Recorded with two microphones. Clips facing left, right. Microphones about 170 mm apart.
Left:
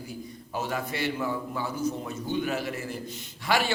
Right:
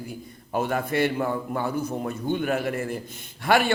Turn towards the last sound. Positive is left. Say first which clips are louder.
# right 5 dB
turn(degrees=-55)  # may be behind; listen again after turning